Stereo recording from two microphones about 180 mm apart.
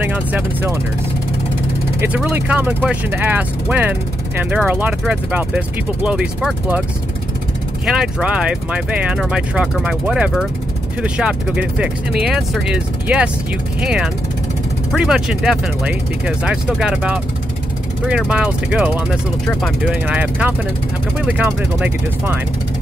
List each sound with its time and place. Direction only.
0.0 s speech: 10° right (ahead or behind)
2.0 s speech: 10° right (ahead or behind)
7.8 s speech: 5° right (ahead or behind)